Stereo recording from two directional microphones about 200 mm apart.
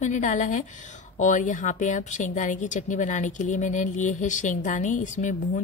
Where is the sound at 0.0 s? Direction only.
40° left (ahead or behind).